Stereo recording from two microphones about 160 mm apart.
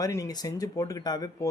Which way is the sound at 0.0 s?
20° left (ahead or behind).